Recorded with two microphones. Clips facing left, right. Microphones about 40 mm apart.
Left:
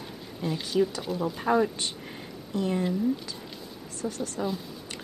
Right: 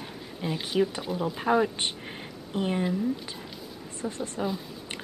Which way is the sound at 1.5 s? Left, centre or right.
Centre.